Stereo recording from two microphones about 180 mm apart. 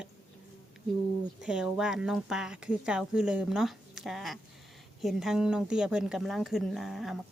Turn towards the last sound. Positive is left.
turn(degrees=0)  # may be behind; listen again after turning